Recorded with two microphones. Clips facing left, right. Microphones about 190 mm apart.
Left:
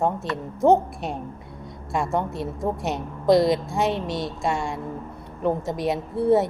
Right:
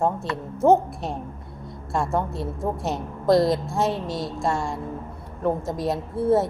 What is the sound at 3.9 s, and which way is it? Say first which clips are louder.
Speech: left 1 dB; 25° left (ahead or behind).